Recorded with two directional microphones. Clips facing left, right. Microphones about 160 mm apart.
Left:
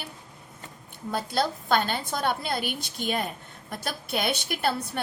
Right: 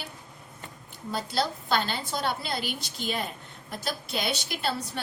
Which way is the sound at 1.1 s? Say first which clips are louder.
Left 2 dB; 50° left (ahead or behind).